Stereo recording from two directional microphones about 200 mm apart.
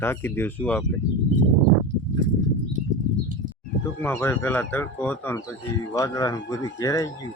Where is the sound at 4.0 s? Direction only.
10° left (ahead or behind).